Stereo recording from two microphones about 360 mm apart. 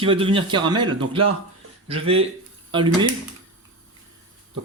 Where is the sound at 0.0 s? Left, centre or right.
Centre.